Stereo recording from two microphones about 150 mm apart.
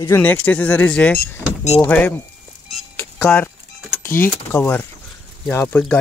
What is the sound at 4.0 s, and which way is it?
Speech, 15° left (ahead or behind).